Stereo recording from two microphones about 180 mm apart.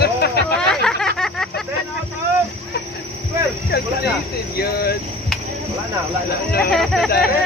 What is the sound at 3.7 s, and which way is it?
Speech, 60° left (ahead or behind).